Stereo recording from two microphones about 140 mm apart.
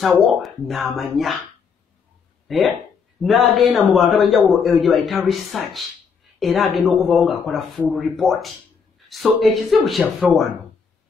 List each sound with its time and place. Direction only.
0.0 s speech: centre (ahead or behind)
2.4 s speech: centre (ahead or behind)